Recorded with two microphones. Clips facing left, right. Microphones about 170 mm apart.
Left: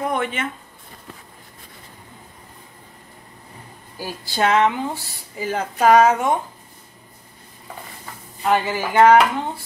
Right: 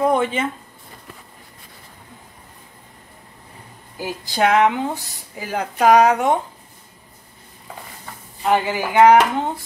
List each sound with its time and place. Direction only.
0.1 s speech: 30° right (ahead or behind)
4.0 s speech: 20° right (ahead or behind)
8.5 s speech: 15° right (ahead or behind)